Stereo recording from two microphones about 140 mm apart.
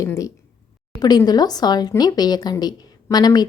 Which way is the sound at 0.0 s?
20° left (ahead or behind).